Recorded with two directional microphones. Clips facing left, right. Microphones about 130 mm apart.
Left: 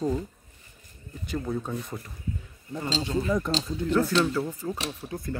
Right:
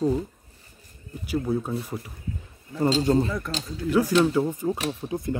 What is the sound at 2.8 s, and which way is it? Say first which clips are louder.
Speech: right 8 dB; 45° right (ahead or behind).